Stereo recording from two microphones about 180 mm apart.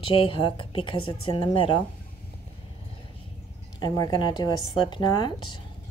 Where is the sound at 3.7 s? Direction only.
20° left (ahead or behind).